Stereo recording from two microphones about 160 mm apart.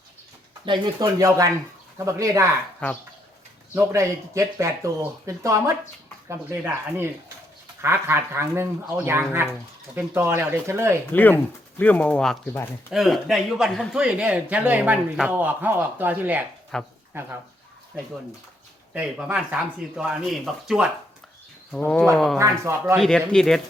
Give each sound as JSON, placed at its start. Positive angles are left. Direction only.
{"t": 0.6, "sound": "speech", "side_deg": -30}
{"t": 3.9, "sound": "speech", "side_deg": -20}
{"t": 11.1, "sound": "speech", "side_deg": 10}
{"t": 16.7, "sound": "speech", "side_deg": 5}
{"t": 17.1, "sound": "speech", "side_deg": -15}
{"t": 18.9, "sound": "speech", "side_deg": -10}
{"t": 22.4, "sound": "speech", "side_deg": -15}
{"t": 23.0, "sound": "speech", "side_deg": 5}